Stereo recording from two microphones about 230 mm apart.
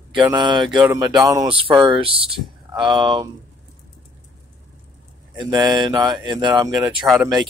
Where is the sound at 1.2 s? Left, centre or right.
Centre.